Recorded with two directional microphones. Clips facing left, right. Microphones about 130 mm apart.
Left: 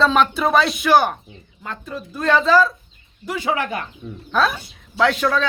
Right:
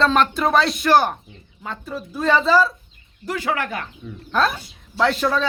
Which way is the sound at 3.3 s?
15° left (ahead or behind).